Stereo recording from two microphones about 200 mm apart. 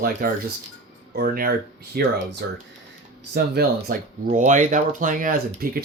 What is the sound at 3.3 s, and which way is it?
Speech, 50° right (ahead or behind).